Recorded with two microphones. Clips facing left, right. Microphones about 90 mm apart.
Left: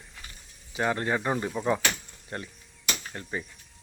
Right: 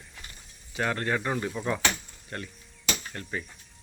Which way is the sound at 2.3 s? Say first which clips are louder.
Left 1 dB; 20° left (ahead or behind).